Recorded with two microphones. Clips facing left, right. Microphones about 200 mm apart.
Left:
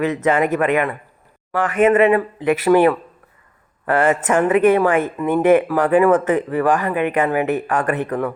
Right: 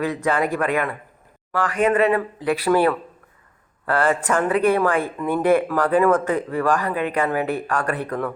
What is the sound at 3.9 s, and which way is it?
Speech, 20° left (ahead or behind).